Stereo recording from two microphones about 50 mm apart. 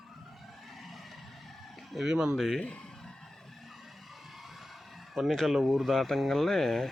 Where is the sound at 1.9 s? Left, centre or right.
Centre.